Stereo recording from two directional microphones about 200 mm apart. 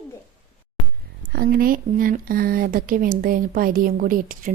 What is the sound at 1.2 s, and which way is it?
Speech, 45° right (ahead or behind).